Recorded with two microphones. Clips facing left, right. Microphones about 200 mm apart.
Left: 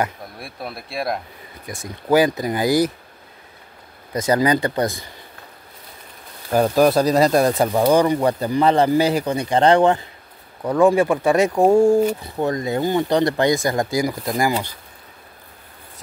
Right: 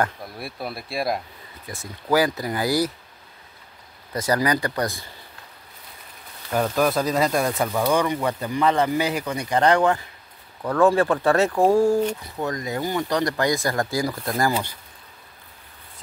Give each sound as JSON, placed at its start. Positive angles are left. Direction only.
{"t": 0.0, "sound": "speech", "side_deg": 0}
{"t": 1.7, "sound": "speech", "side_deg": 20}
{"t": 4.1, "sound": "speech", "side_deg": 20}
{"t": 6.5, "sound": "speech", "side_deg": 35}
{"t": 10.6, "sound": "speech", "side_deg": 15}